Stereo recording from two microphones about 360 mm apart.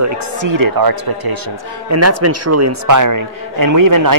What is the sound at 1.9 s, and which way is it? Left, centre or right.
A man's voice, right.